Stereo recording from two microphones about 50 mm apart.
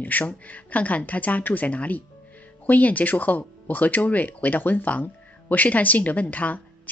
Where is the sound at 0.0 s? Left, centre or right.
Left.